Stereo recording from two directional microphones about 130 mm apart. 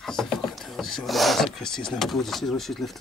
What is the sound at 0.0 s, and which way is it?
Speech, 5° left (ahead or behind).